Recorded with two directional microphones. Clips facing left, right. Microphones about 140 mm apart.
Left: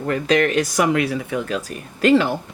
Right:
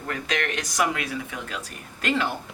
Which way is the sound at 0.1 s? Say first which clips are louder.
Left 11 dB; 30° left (ahead or behind).